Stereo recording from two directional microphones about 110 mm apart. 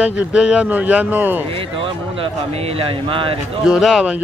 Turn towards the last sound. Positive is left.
turn(degrees=-5)  # may be behind; listen again after turning